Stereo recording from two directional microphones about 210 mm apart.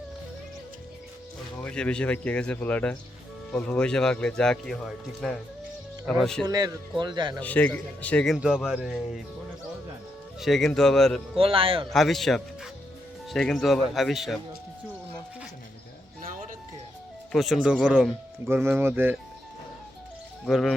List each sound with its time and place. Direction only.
1.5 s speech: 5° left (ahead or behind)
6.4 s speech: 20° right (ahead or behind)
7.4 s speech: 5° left (ahead or behind)
10.4 s speech: centre (ahead or behind)
11.3 s speech: 25° right (ahead or behind)
11.9 s speech: centre (ahead or behind)
16.2 s a sound: 40° right (ahead or behind)
17.3 s speech: centre (ahead or behind)
20.4 s speech: centre (ahead or behind)